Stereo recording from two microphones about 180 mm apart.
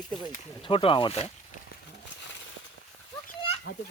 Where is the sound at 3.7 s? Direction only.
90° left.